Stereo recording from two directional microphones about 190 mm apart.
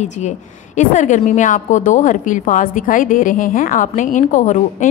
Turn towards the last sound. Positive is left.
turn(degrees=40)  # may be behind; listen again after turning